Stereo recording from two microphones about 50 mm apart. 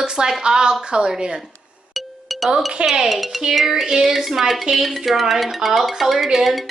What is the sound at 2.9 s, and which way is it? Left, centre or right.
Speech, centre.